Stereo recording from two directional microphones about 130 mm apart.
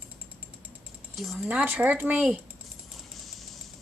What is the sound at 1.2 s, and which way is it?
Speech, centre (ahead or behind).